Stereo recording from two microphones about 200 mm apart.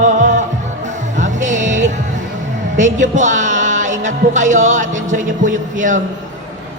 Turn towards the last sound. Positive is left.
turn(degrees=-40)  # may be behind; listen again after turning